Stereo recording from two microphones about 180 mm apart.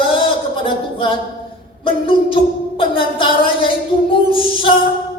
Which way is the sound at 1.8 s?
30° left (ahead or behind).